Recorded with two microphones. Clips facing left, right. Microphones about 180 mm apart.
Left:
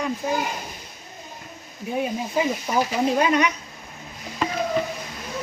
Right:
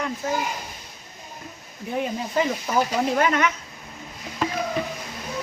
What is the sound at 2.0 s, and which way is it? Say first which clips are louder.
Speech: even; 15° left (ahead or behind).